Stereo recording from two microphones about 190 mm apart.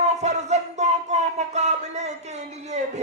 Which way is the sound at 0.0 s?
35° right (ahead or behind).